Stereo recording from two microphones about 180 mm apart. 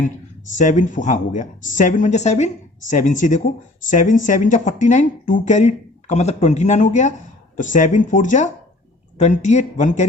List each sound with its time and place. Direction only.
0.5 s speech: 45° left (ahead or behind)